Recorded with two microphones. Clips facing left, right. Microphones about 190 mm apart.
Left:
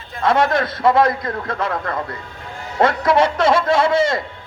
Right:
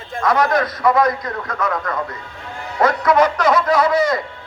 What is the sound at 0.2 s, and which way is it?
A man's voice, 25° left (ahead or behind).